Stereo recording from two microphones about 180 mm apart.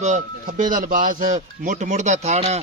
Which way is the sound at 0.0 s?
40° right (ahead or behind).